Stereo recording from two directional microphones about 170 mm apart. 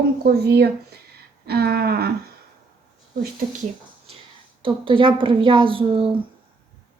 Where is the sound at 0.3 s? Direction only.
70° right (ahead or behind).